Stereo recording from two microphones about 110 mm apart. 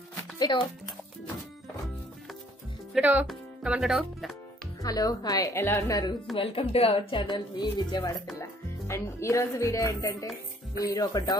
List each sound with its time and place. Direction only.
0.4 s music: 40° left (ahead or behind)
3.0 s speech: 15° right (ahead or behind)
4.8 s a woman's voice: 35° left (ahead or behind)
6.3 s speech: 55° left (ahead or behind)
7.2 s a woman's voice: 45° left (ahead or behind)
8.4 s a woman's voice: 25° left (ahead or behind)